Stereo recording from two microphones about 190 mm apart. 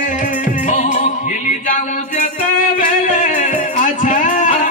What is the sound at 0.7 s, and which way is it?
Music, 40° left (ahead or behind).